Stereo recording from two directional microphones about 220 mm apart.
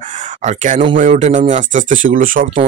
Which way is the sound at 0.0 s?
35° right (ahead or behind).